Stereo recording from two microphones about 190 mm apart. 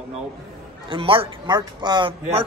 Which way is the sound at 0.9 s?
30° right (ahead or behind).